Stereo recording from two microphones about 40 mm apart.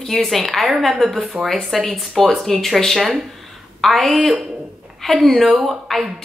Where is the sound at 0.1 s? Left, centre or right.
Centre.